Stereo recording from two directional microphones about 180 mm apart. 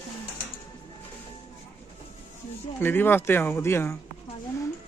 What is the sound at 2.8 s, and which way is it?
Speech, 10° left (ahead or behind).